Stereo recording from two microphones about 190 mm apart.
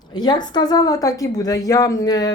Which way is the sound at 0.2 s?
20° left (ahead or behind).